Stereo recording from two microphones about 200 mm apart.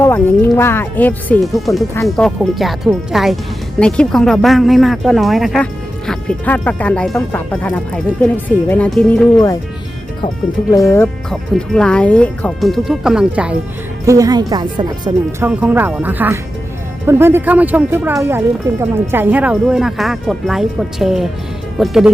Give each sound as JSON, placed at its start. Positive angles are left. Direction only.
{"t": 0.0, "sound": "speech", "side_deg": 10}
{"t": 10.7, "sound": "speech", "side_deg": 15}
{"t": 11.3, "sound": "speech", "side_deg": 5}
{"t": 14.0, "sound": "speech", "side_deg": -15}
{"t": 15.4, "sound": "speech", "side_deg": -10}